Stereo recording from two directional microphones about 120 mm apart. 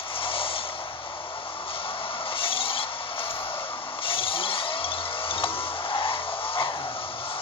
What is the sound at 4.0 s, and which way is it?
Vehicle, 50° left (ahead or behind).